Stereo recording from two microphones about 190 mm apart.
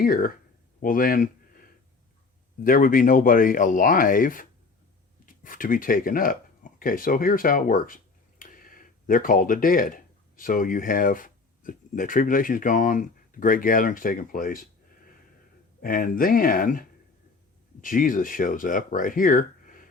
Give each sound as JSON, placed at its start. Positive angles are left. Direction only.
{"t": 0.0, "sound": "speech", "side_deg": 50}
{"t": 0.8, "sound": "a sound", "side_deg": 50}
{"t": 2.6, "sound": "speech", "side_deg": 45}
{"t": 15.8, "sound": "speech", "side_deg": 50}